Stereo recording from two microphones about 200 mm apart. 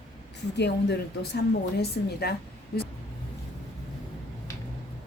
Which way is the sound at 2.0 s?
50° left (ahead or behind).